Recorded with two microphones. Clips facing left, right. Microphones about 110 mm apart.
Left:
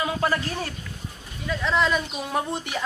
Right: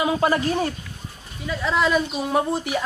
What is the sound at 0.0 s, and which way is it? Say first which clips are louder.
Speech: right 5 dB; 20° right (ahead or behind).